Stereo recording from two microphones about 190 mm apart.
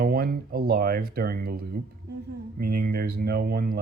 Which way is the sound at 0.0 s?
50° right (ahead or behind).